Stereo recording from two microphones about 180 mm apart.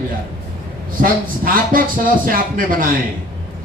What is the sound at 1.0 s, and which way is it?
Speech, 50° right (ahead or behind).